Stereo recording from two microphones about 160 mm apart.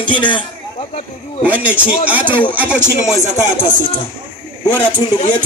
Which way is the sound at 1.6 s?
10° right (ahead or behind).